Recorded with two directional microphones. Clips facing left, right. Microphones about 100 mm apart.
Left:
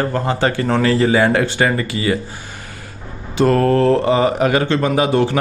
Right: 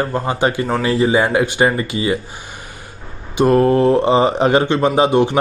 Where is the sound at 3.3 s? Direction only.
20° right (ahead or behind).